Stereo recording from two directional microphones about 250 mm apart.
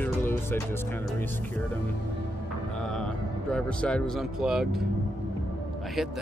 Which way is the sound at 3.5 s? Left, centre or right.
Centre.